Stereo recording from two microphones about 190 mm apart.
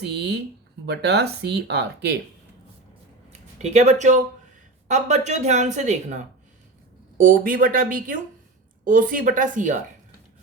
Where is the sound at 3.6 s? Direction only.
35° right (ahead or behind).